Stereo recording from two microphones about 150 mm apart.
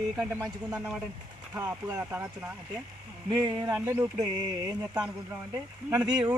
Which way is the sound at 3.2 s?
30° right (ahead or behind).